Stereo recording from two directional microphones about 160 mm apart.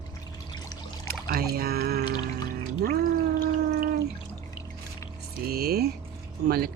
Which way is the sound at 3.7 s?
85° right.